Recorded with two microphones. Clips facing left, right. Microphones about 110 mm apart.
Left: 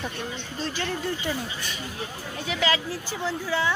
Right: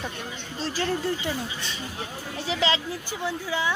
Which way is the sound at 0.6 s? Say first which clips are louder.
Right 3 dB; 35° right (ahead or behind).